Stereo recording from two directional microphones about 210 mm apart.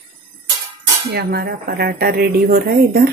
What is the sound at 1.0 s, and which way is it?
Speech, 50° right (ahead or behind).